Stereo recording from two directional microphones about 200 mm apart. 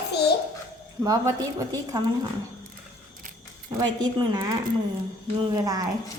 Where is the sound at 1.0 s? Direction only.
15° right (ahead or behind).